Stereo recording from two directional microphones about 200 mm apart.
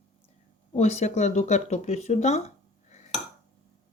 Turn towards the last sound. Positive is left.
turn(degrees=35)  # may be behind; listen again after turning